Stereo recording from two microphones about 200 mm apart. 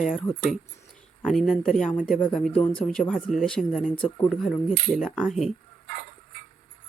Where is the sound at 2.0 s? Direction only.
45° left (ahead or behind).